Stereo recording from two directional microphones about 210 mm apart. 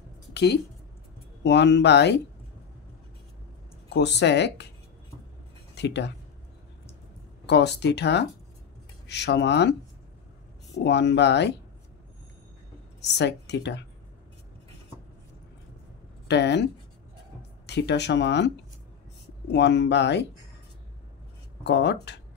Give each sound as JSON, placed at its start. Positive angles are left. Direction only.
{"t": 0.3, "sound": "speech", "side_deg": 55}
{"t": 3.9, "sound": "speech", "side_deg": 55}
{"t": 5.8, "sound": "speech", "side_deg": 55}
{"t": 7.4, "sound": "speech", "side_deg": 55}
{"t": 10.8, "sound": "speech", "side_deg": 55}
{"t": 13.2, "sound": "speech", "side_deg": 55}
{"t": 16.3, "sound": "speech", "side_deg": 55}
{"t": 21.6, "sound": "speech", "side_deg": 55}